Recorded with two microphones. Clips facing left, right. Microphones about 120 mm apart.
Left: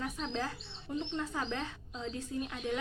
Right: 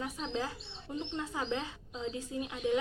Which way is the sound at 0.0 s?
20° right (ahead or behind).